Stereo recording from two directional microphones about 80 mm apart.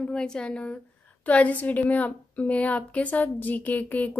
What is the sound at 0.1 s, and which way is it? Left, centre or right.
A woman's voice, centre.